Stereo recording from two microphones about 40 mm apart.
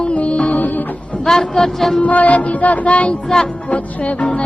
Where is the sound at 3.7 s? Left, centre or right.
Left.